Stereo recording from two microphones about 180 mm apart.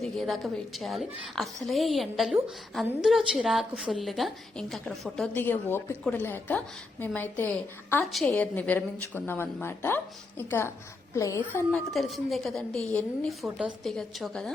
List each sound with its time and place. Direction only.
0.0 s a woman's voice: centre (ahead or behind)
11.7 s a woman's voice: centre (ahead or behind)